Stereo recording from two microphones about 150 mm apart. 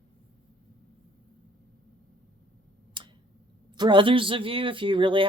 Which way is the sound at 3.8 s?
30° right (ahead or behind).